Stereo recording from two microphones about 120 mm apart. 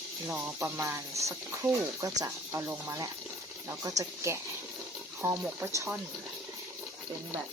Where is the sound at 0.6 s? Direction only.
20° right (ahead or behind).